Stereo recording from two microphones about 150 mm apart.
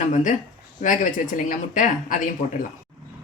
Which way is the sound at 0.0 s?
55° left (ahead or behind).